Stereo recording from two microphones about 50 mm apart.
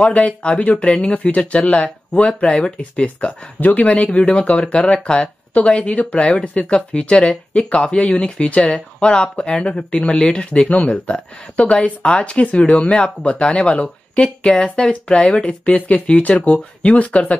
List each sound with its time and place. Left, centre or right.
0.0 s speech: left